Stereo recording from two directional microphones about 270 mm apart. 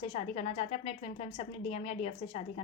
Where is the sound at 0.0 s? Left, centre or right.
Left.